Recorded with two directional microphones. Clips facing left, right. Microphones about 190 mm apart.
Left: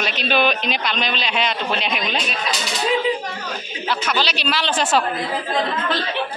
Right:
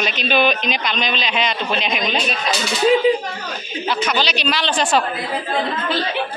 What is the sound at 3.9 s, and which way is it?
Speech, 5° left (ahead or behind).